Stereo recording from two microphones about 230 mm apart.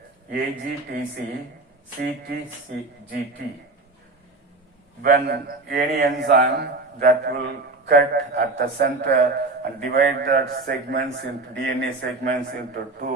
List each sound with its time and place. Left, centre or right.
0.3 s speech: right
5.0 s a man's voice: right
12.2 s speech: right